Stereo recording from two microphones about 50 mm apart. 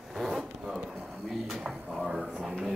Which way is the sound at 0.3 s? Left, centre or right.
Centre.